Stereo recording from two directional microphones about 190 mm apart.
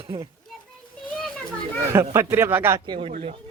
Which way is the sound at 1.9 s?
15° right (ahead or behind).